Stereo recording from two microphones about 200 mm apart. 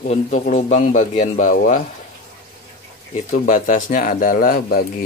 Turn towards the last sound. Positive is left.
turn(degrees=45)  # may be behind; listen again after turning